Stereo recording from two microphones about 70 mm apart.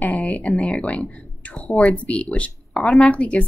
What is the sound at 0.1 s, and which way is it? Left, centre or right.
Speech, centre.